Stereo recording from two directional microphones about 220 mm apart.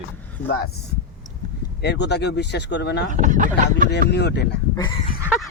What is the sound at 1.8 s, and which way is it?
Speech, 50° left (ahead or behind).